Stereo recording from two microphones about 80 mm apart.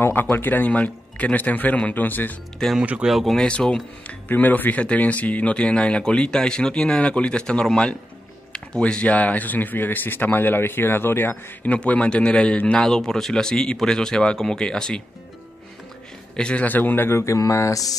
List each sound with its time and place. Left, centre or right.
0.0 s speech: left
2.8 s speech: centre
3.1 s speech: centre
3.3 s speech: centre
4.3 s speech: left
16.3 s speech: centre; by 17.9 s left